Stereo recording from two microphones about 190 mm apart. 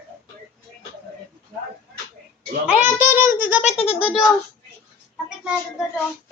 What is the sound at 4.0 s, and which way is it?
Speech, 5° right (ahead or behind).